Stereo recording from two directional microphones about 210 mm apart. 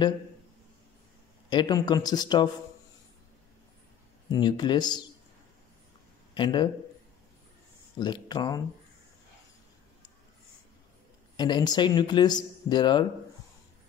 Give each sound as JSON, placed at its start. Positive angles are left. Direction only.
{"t": 1.5, "sound": "speech", "side_deg": 20}
{"t": 4.3, "sound": "speech", "side_deg": 20}
{"t": 6.3, "sound": "speech", "side_deg": 20}
{"t": 8.0, "sound": "speech", "side_deg": 20}
{"t": 11.3, "sound": "speech", "side_deg": 20}